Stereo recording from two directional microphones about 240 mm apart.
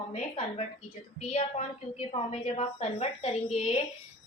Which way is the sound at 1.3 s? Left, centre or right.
Left.